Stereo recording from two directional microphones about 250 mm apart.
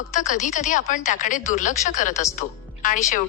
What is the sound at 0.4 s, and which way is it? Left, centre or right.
A woman's voice, left.